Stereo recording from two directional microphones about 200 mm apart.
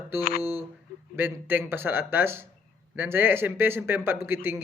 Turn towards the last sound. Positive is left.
turn(degrees=-10)  # may be behind; listen again after turning